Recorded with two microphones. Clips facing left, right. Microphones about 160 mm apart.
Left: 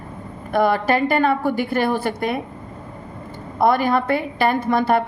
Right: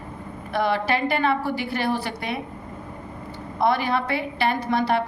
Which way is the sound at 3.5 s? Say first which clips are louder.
Left 5 dB; 50° left (ahead or behind).